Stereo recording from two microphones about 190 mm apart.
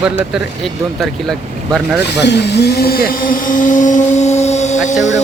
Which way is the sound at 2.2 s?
60° left (ahead or behind).